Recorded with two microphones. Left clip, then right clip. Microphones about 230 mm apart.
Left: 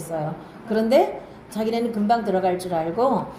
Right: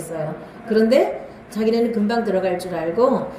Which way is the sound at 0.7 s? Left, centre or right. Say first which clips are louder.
Right 2 dB; centre.